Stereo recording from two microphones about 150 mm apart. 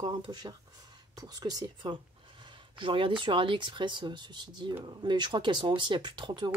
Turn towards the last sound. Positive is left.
turn(degrees=-30)  # may be behind; listen again after turning